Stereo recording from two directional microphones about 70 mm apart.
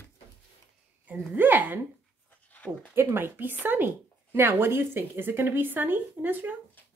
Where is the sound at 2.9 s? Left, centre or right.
Right.